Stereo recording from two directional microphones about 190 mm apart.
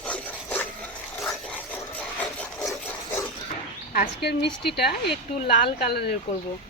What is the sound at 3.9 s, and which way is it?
A woman's voice, 50° left (ahead or behind).